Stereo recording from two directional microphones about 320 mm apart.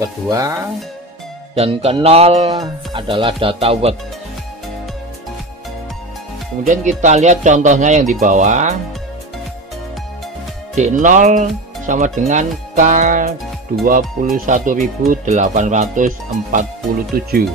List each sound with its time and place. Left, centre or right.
0.0 s speech: centre
6.6 s speech: right
10.7 s speech: right
17.1 s speech: right